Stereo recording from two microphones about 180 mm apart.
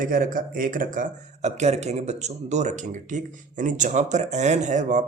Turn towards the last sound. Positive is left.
turn(degrees=-45)  # may be behind; listen again after turning